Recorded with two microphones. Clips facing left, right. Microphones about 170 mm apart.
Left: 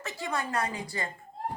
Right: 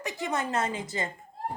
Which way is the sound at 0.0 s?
20° right (ahead or behind).